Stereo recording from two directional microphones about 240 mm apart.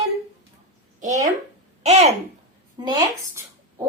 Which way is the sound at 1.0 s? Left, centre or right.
Right.